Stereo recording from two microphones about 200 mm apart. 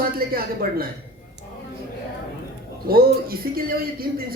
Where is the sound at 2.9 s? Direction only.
50° right (ahead or behind).